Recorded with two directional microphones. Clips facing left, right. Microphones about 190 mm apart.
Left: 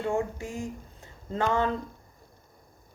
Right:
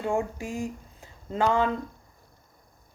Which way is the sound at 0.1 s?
15° right (ahead or behind).